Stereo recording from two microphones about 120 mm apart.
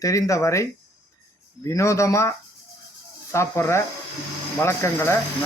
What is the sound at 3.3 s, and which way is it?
Speech, 20° left (ahead or behind).